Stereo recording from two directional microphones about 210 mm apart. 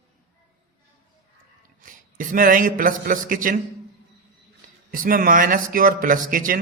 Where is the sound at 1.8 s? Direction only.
40° right (ahead or behind).